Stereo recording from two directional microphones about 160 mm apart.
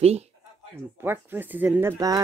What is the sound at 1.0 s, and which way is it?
Speech, 15° right (ahead or behind).